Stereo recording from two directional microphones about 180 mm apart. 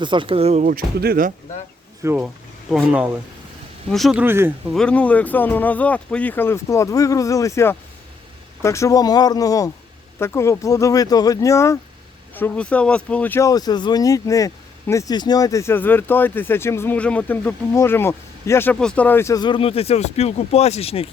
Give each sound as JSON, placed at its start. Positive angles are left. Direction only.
{"t": 0.0, "sound": "speech", "side_deg": -25}
{"t": 2.0, "sound": "speech", "side_deg": -10}
{"t": 4.7, "sound": "speech", "side_deg": 5}